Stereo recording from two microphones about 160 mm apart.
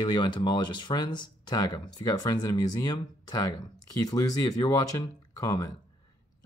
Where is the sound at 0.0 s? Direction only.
30° left (ahead or behind).